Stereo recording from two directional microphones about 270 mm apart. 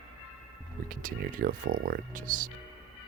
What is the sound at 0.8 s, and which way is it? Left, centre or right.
Speech, right.